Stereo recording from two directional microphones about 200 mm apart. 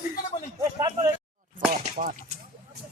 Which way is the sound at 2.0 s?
40° right (ahead or behind).